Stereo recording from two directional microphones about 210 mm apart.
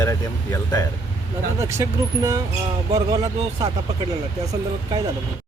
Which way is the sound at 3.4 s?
30° right (ahead or behind).